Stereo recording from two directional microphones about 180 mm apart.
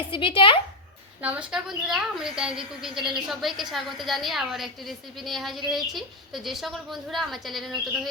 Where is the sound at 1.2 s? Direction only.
5° right (ahead or behind).